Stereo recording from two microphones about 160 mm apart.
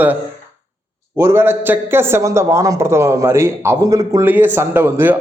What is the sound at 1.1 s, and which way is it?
Speech, 15° right (ahead or behind).